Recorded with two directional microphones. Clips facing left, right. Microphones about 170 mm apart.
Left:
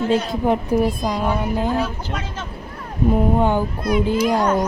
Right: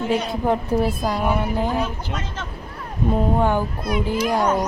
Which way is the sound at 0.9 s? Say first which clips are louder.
Left 1 dB; 5° right (ahead or behind).